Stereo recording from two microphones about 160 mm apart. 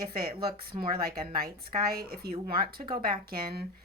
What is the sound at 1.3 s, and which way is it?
Speech, 70° right (ahead or behind).